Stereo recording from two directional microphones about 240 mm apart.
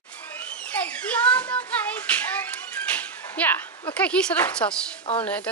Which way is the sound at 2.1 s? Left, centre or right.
Centre.